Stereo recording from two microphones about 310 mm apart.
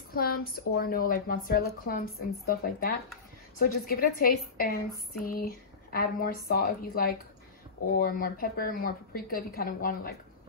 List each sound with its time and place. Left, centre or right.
0.1 s speech: left